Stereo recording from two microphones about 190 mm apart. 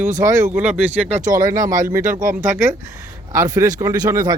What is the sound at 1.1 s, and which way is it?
Speech, 45° right (ahead or behind).